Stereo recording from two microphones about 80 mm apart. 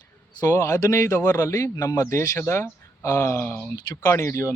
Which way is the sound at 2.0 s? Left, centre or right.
Left.